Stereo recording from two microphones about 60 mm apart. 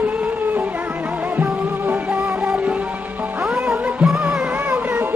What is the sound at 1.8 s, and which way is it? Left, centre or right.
Music, right.